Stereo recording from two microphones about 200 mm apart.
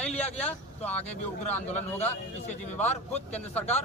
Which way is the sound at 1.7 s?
35° left (ahead or behind).